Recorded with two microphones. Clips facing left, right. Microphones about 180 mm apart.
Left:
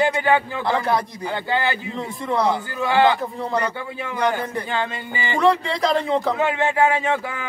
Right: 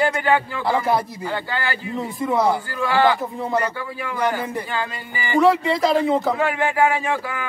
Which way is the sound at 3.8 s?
25° left (ahead or behind).